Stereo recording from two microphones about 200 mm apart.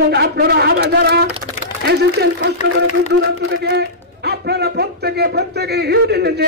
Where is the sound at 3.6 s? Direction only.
55° right (ahead or behind).